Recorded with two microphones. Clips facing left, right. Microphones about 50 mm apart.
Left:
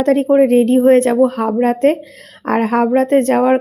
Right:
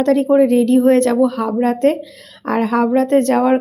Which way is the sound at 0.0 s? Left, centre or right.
Left.